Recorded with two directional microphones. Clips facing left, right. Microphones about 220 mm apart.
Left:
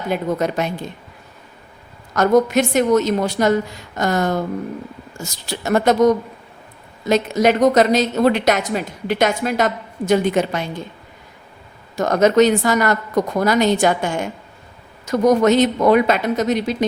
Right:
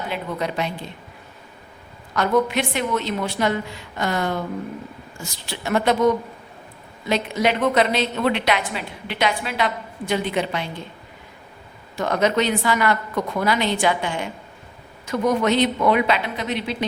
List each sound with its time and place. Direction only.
0.1 s speech: 45° left (ahead or behind)
2.1 s a woman's voice: 45° left (ahead or behind)
11.9 s speech: 45° left (ahead or behind)